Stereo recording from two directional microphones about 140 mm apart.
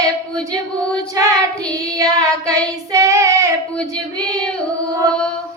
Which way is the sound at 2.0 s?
25° right (ahead or behind).